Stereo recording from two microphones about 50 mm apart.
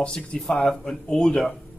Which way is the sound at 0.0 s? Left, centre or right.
Centre.